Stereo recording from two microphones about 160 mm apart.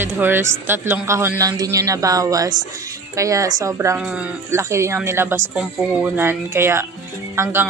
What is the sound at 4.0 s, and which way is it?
Speech, 10° right (ahead or behind).